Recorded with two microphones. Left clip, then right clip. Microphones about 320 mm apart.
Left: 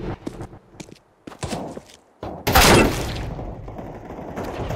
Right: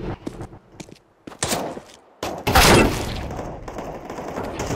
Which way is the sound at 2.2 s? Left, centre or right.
Right.